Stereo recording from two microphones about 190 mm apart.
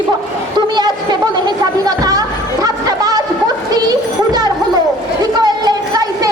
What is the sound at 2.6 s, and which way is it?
Music, 20° right (ahead or behind).